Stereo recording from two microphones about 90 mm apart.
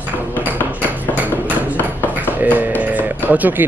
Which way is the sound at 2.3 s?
20° right (ahead or behind).